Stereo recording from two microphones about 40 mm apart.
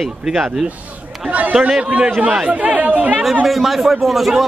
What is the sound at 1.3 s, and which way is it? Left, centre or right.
Speech, right.